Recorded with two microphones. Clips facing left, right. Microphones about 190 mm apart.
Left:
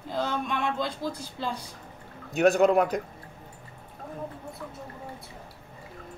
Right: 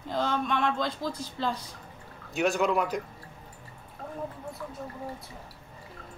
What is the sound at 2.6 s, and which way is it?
Speech, 45° left (ahead or behind).